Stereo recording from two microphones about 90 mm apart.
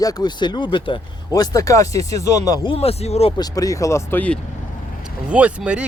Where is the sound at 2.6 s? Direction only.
90° left.